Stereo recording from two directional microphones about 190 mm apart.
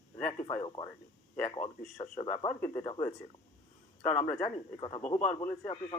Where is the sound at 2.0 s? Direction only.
30° left (ahead or behind).